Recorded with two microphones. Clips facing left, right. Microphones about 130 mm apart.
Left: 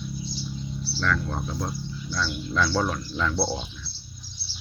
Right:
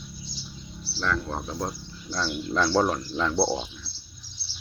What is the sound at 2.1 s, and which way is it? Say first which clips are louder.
Speech: right 1 dB; 35° right (ahead or behind).